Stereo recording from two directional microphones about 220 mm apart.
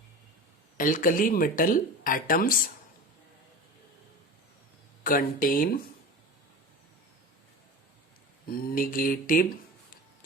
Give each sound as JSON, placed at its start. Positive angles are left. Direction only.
{"t": 0.8, "sound": "speech", "side_deg": 40}
{"t": 5.0, "sound": "speech", "side_deg": 40}
{"t": 8.4, "sound": "speech", "side_deg": 40}